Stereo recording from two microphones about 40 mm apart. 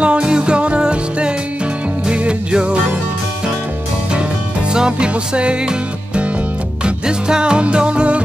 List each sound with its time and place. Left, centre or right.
0.0 s music: right
4.7 s music: right